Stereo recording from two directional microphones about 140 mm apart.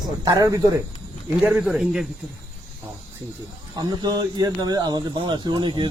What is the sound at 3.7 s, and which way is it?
Speech, 30° right (ahead or behind).